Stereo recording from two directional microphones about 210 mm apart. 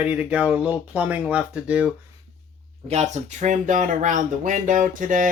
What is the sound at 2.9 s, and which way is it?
Speech, 30° right (ahead or behind).